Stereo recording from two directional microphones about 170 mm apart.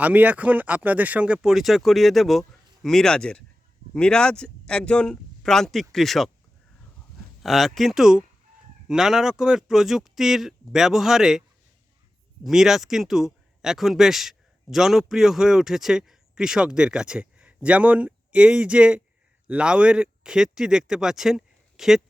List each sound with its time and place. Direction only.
0.0 s speech: 10° right (ahead or behind)
7.4 s speech: centre (ahead or behind)